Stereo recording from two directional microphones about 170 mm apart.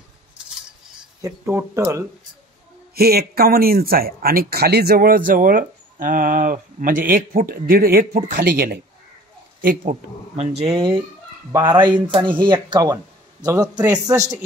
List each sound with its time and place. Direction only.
1.2 s speech: 15° right (ahead or behind)
2.9 s speech: 65° right (ahead or behind)
10.3 s speech: 35° right (ahead or behind)
11.5 s speech: 25° right (ahead or behind)